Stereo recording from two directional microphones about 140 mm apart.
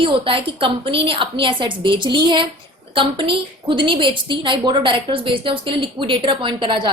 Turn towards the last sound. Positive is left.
turn(degrees=-35)  # may be behind; listen again after turning